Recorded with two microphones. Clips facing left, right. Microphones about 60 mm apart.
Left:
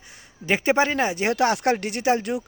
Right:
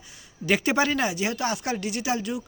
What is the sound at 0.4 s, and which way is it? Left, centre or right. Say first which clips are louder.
Speech: left 2 dB; left.